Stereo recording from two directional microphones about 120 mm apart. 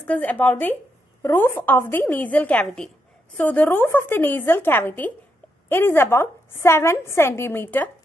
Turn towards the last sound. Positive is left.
turn(degrees=15)  # may be behind; listen again after turning